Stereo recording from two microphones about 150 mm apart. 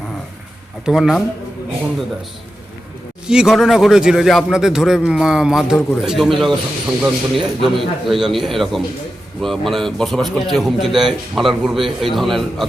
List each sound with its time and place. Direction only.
0.9 s a man's voice: centre (ahead or behind)
3.2 s a man's voice: 5° right (ahead or behind)